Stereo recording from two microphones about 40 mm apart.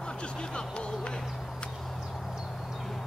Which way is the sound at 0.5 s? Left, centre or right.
Left.